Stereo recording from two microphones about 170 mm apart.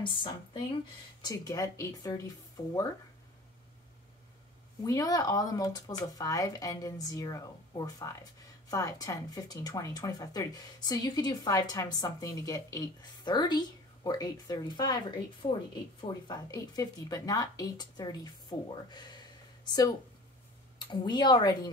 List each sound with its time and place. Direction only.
0.0 s speech: 30° left (ahead or behind)
4.8 s speech: 20° left (ahead or behind)